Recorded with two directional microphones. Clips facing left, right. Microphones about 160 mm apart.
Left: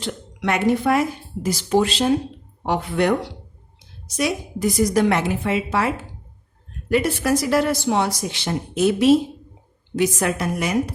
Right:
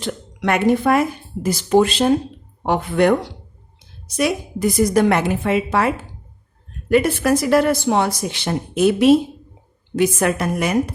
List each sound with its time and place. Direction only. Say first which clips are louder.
0.0 s speech: right 3 dB; 55° right (ahead or behind)
4.2 s a woman's voice: right 3 dB; 55° right (ahead or behind)